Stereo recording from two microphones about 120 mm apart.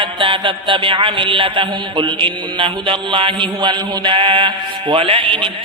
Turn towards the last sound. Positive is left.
turn(degrees=-50)  # may be behind; listen again after turning